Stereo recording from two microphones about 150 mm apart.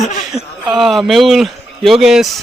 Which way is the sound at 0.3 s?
25° right (ahead or behind).